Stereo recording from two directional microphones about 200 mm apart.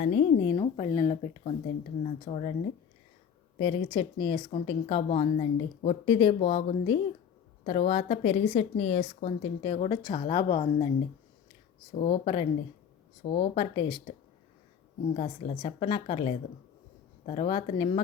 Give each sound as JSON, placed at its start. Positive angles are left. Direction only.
{"t": 0.0, "sound": "speech", "side_deg": 30}
{"t": 3.6, "sound": "speech", "side_deg": 25}
{"t": 11.9, "sound": "speech", "side_deg": 30}
{"t": 15.1, "sound": "speech", "side_deg": 30}